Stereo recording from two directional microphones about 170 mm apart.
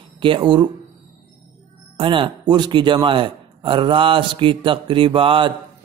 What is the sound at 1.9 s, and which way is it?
A man's voice, 30° right (ahead or behind).